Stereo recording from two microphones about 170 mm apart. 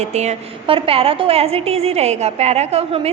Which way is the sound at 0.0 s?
40° right (ahead or behind).